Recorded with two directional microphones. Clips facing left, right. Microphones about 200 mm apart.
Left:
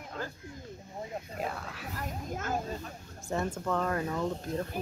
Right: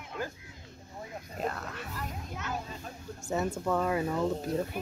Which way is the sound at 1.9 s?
45° left (ahead or behind).